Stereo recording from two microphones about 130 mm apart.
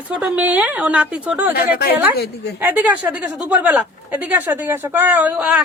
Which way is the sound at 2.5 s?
15° right (ahead or behind).